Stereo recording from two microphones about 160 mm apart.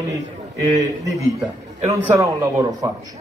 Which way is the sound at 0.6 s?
20° right (ahead or behind).